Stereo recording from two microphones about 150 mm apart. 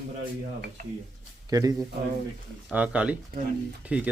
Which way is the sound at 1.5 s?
25° right (ahead or behind).